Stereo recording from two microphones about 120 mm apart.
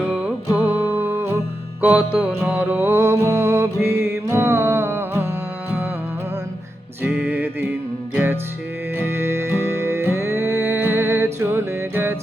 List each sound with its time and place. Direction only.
0.0 s music: 10° right (ahead or behind)
7.0 s music: 10° right (ahead or behind)